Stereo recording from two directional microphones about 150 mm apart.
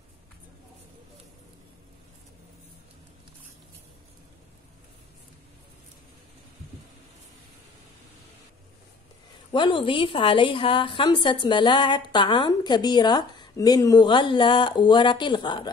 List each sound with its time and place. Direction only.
9.5 s a woman's voice: 35° left (ahead or behind)